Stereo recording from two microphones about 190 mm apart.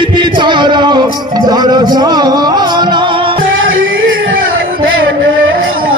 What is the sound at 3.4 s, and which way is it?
Music, 90° right.